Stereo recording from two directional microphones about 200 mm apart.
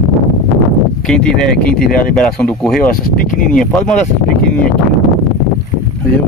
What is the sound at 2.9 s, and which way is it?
Speech, 45° left (ahead or behind).